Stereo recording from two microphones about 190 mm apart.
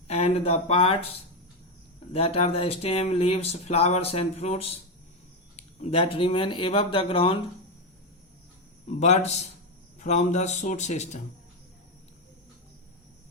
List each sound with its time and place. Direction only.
0.1 s speech: 35° left (ahead or behind)
2.1 s speech: 30° left (ahead or behind)
9.0 s speech: 35° left (ahead or behind)